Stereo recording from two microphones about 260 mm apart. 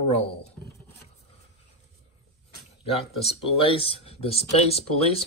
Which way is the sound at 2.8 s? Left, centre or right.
Left.